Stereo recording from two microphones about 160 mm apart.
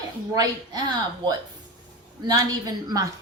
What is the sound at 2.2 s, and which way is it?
Speech, 25° right (ahead or behind).